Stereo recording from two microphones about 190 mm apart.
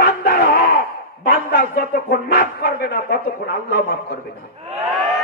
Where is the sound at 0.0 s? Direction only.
55° left (ahead or behind).